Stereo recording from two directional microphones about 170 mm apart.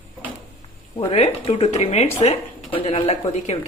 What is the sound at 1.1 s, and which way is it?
A woman's voice, 40° left (ahead or behind).